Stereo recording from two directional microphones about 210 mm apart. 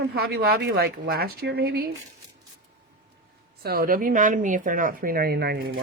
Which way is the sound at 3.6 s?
45° right (ahead or behind).